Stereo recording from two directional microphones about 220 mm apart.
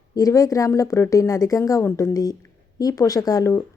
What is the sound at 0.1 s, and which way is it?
Speech, 15° left (ahead or behind).